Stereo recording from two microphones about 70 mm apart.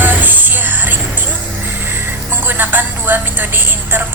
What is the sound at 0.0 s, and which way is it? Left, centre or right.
Music, right.